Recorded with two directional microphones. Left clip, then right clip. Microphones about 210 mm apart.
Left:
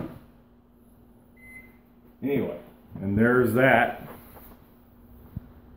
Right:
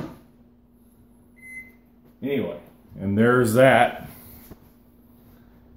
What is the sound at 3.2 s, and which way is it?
Speech, 55° right (ahead or behind).